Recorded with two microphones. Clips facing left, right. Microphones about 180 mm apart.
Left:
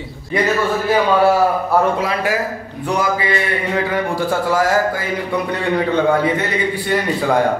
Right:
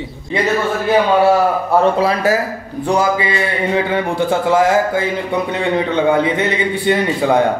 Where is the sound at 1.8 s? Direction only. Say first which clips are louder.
Right 3 dB; 30° right (ahead or behind).